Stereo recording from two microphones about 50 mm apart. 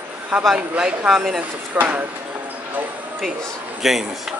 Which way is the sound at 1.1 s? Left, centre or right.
Centre.